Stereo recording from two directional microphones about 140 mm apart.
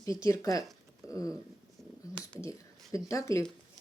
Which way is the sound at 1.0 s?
25° left (ahead or behind).